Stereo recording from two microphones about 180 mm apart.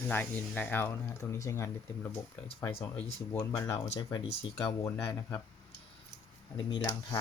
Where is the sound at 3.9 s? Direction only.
30° left (ahead or behind).